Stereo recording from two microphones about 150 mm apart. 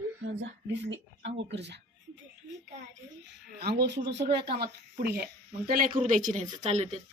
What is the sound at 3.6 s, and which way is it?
Speech, 90° right.